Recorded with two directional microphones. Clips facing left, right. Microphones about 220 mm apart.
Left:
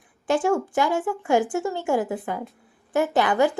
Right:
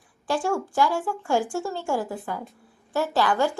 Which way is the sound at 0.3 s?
20° left (ahead or behind).